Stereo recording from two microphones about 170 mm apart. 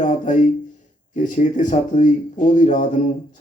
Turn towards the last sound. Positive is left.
turn(degrees=50)  # may be behind; listen again after turning